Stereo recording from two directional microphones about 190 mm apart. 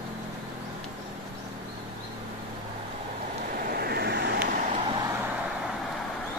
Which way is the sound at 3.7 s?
55° right (ahead or behind).